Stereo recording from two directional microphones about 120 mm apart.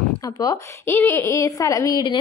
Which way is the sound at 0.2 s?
30° left (ahead or behind).